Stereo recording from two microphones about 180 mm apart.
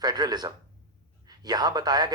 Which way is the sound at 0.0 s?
20° right (ahead or behind).